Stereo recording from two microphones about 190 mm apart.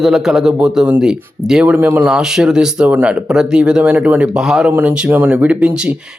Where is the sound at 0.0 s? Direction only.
Centre (ahead or behind).